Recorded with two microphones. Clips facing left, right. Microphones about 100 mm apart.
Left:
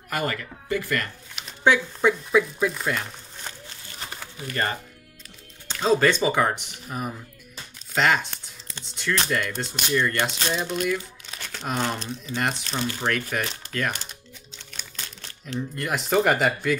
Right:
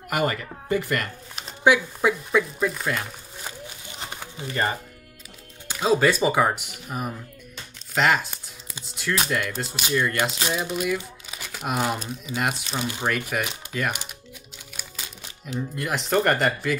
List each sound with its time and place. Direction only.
0.1 s speech: 20° right (ahead or behind)
1.6 s speech: 5° right (ahead or behind)